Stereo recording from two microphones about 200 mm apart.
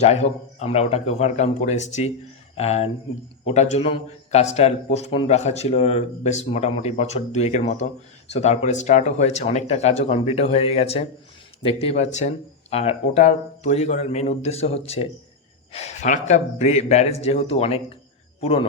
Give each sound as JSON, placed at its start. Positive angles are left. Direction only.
{"t": 0.0, "sound": "a man's voice", "side_deg": 35}